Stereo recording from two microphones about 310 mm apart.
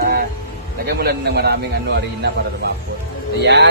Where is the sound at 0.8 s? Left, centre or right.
Right.